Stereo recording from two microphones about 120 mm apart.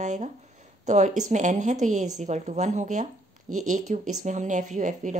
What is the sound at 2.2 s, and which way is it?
A woman's voice, 70° right (ahead or behind).